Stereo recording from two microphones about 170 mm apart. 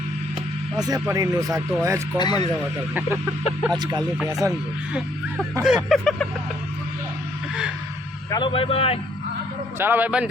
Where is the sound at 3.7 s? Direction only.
25° right (ahead or behind).